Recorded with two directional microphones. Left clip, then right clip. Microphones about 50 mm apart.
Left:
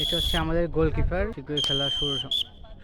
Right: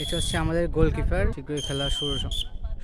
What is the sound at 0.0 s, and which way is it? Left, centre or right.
Speech, right.